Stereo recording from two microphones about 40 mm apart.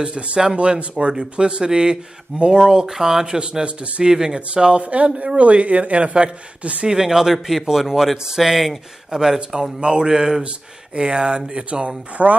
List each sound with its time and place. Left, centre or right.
0.0 s speech: right
4.0 s speech: centre
4.8 s speech: right
6.9 s speech: centre
9.1 s speech: centre
12.2 s speech: right